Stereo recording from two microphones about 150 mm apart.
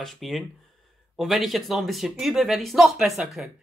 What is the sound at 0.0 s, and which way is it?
Speech, centre (ahead or behind).